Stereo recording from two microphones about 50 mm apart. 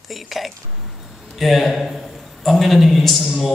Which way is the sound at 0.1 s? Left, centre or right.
Centre.